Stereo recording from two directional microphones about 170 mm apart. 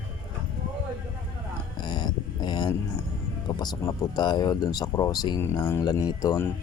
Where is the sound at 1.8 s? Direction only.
25° left (ahead or behind).